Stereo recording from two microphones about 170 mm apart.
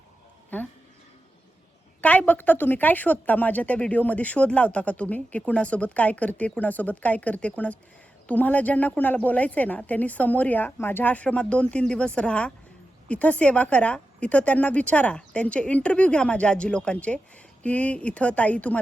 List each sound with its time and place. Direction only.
0.5 s speech: 10° left (ahead or behind)
2.0 s a woman's voice: 10° left (ahead or behind)